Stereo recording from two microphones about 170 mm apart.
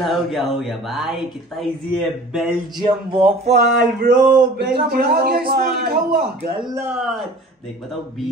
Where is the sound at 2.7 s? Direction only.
30° right (ahead or behind).